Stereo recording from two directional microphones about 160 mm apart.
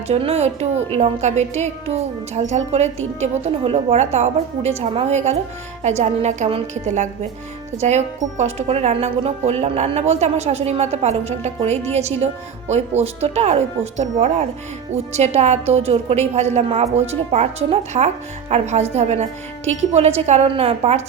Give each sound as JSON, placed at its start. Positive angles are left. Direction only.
{"t": 0.1, "sound": "speech", "side_deg": -40}